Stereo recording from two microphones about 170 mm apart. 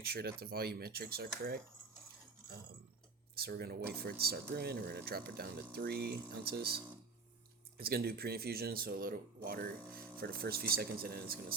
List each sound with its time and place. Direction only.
0.0 s speech: 70° right (ahead or behind)
3.3 s speech: 65° right (ahead or behind)